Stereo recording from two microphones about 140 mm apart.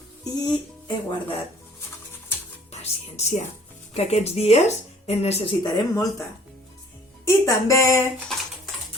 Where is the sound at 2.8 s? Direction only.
50° left (ahead or behind).